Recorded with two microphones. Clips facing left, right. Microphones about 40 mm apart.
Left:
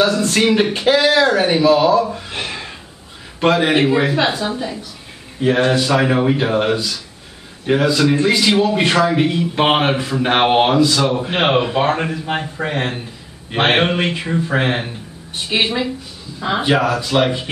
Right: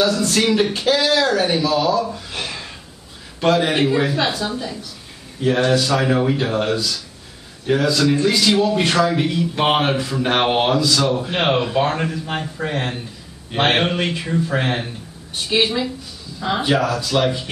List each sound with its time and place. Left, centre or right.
0.0 s a man's voice: left